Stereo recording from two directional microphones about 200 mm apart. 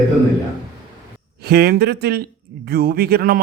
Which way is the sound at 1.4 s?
50° right (ahead or behind).